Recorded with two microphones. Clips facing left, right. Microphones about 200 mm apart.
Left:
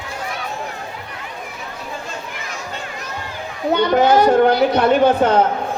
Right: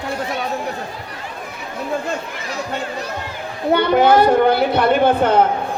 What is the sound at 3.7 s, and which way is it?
A child's voice, 55° right (ahead or behind).